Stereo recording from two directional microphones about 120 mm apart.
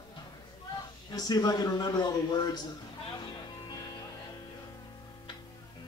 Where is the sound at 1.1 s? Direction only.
35° left (ahead or behind).